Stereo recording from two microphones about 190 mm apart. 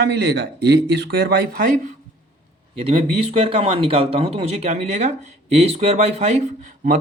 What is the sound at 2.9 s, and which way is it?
Speech, 30° right (ahead or behind).